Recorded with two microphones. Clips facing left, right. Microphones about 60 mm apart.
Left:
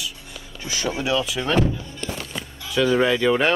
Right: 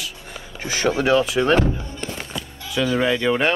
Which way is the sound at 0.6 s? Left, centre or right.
Right.